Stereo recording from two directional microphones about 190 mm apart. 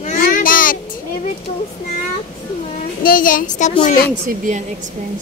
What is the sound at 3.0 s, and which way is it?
Speech, 50° left (ahead or behind).